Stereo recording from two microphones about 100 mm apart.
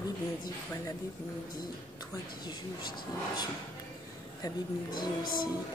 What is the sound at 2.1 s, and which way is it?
Speech, 45° left (ahead or behind).